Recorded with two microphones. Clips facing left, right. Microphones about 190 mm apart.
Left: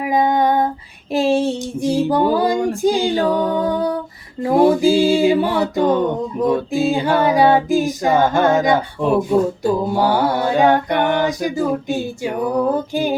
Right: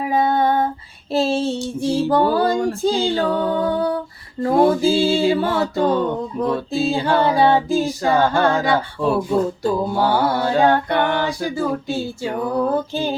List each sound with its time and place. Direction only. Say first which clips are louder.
0.0 s female singing: left 2 dB; 15° left (ahead or behind)
1.1 s music: left 3 dB; 15° left (ahead or behind)
4.5 s music: left 3 dB; 15° left (ahead or behind)